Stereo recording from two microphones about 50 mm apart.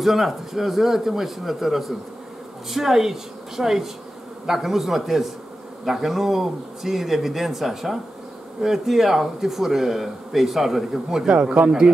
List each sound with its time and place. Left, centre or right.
0.0 s speech: centre
11.3 s speech: right